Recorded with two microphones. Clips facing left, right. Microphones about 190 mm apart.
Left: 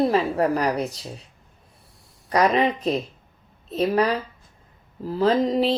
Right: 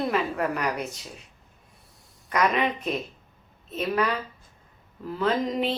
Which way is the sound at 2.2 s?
35° left (ahead or behind).